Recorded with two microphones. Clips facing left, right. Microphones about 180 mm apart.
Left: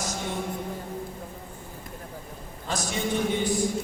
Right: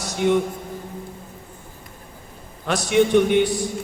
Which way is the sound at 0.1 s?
70° right (ahead or behind).